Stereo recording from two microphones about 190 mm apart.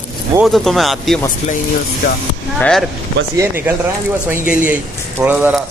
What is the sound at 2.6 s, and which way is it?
Speech, centre (ahead or behind).